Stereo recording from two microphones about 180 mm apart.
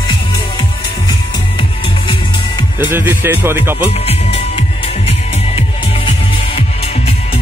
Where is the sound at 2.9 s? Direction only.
10° right (ahead or behind).